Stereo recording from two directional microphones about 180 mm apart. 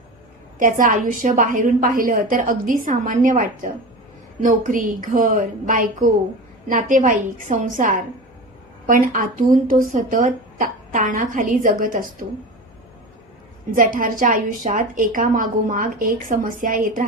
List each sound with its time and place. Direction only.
0.6 s a woman's voice: 50° right (ahead or behind)
9.5 s a woman's voice: 50° right (ahead or behind)
13.7 s a woman's voice: 50° right (ahead or behind)